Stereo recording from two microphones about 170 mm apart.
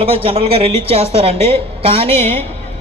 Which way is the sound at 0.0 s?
35° right (ahead or behind).